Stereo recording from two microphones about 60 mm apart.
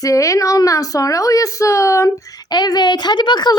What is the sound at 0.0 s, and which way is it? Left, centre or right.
A woman's voice, left.